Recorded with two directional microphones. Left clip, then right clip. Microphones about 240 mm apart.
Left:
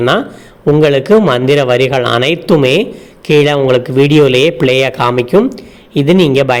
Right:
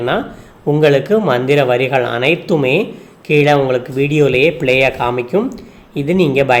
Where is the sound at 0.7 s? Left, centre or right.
Left.